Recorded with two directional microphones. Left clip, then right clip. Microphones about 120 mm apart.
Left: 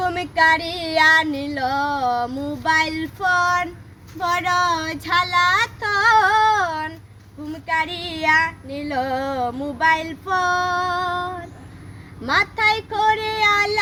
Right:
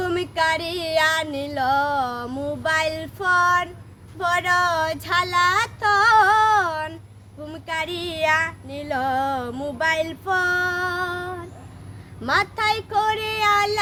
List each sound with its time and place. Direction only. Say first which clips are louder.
0.0 s child singing: left 4 dB; 35° right (ahead or behind)